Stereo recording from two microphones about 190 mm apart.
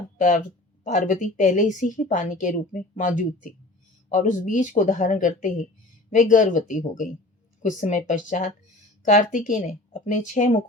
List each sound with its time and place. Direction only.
0.2 s a woman's voice: 45° left (ahead or behind)